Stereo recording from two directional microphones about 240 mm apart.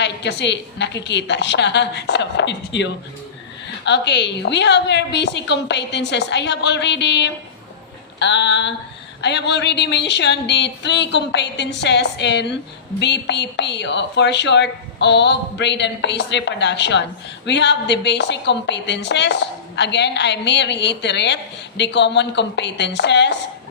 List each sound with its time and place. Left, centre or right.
0.0 s a woman's voice: left